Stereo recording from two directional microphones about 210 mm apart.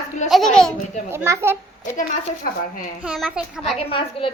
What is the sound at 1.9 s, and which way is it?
Speech, 40° left (ahead or behind).